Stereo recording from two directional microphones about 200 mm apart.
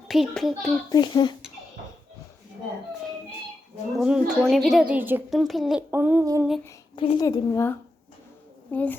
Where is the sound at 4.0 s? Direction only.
5° right (ahead or behind).